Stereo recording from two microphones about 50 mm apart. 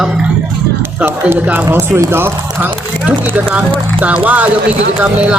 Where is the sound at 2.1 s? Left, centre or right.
Right.